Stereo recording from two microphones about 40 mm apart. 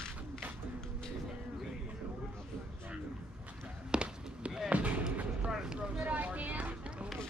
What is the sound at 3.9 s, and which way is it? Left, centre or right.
Basketball bounce, right.